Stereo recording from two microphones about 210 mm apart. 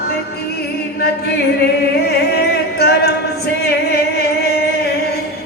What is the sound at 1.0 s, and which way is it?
Chant, 50° left (ahead or behind).